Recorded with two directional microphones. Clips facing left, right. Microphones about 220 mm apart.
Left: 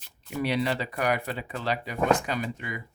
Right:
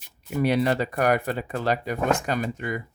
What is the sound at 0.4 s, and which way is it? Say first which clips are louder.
Speech: right 5 dB; 45° right (ahead or behind).